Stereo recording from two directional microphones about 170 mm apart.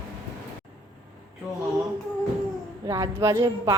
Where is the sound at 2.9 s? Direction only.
15° right (ahead or behind).